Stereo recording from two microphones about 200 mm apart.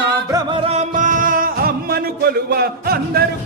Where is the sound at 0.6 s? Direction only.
35° right (ahead or behind).